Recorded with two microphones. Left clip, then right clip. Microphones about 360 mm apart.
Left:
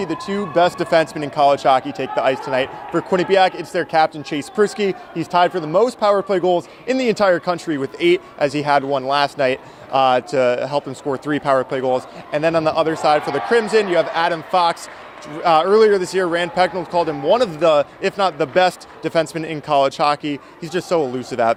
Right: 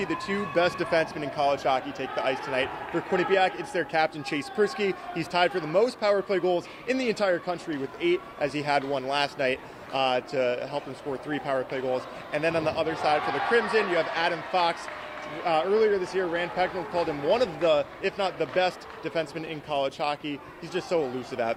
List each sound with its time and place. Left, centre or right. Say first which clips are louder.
0.0 s speech: left 6 dB; left